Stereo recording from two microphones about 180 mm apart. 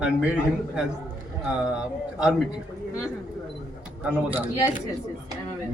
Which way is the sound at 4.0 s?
5° right (ahead or behind).